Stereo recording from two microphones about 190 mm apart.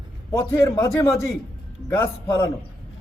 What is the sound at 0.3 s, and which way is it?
Speech, 15° left (ahead or behind).